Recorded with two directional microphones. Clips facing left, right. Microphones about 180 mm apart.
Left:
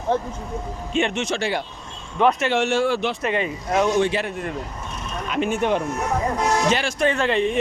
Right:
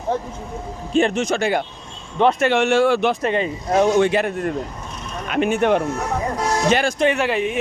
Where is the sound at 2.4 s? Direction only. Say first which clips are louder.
Right 4 dB; 65° right (ahead or behind).